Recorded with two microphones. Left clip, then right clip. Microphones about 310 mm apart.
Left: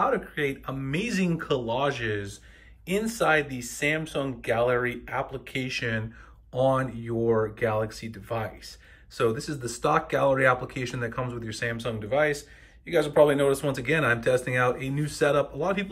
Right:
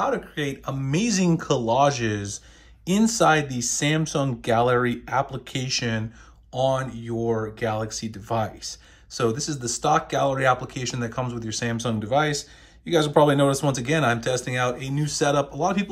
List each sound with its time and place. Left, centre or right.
0.0 s speech: centre